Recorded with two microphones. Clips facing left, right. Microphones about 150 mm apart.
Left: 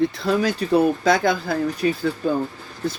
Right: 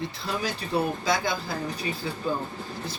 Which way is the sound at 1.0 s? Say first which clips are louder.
Left 8 dB; 60° left (ahead or behind).